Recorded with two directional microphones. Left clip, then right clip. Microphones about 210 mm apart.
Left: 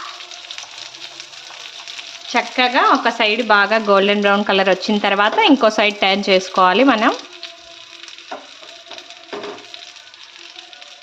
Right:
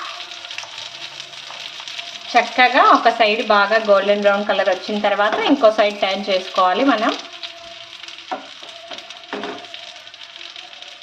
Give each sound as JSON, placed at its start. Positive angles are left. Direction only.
{"t": 2.3, "sound": "speech", "side_deg": 20}